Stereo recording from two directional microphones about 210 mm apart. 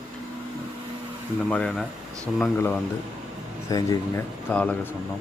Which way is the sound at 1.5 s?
5° left (ahead or behind).